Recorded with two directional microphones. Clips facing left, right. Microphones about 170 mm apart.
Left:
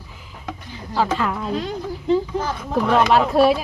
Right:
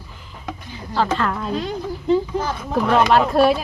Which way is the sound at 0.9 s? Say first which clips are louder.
Even; 10° left (ahead or behind).